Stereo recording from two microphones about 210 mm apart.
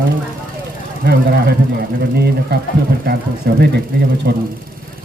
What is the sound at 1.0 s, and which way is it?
Speech, 45° right (ahead or behind).